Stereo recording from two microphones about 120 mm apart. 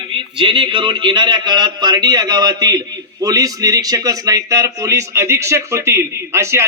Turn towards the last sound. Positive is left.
turn(degrees=-20)  # may be behind; listen again after turning